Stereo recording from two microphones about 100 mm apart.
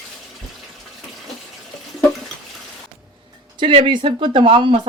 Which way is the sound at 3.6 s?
55° right (ahead or behind).